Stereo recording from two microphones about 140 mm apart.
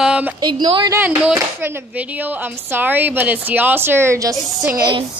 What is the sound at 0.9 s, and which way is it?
Speech, 10° right (ahead or behind).